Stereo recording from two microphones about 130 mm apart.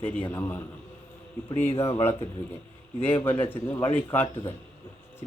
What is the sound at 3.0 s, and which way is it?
A man's voice, 15° left (ahead or behind).